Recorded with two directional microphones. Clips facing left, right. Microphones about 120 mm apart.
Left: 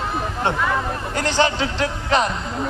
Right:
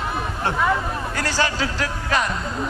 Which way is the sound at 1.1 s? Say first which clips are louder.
Left 5 dB; 20° left (ahead or behind).